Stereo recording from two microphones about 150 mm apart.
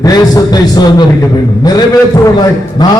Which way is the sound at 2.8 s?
25° left (ahead or behind).